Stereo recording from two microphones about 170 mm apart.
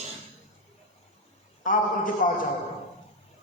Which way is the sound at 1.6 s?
50° left (ahead or behind).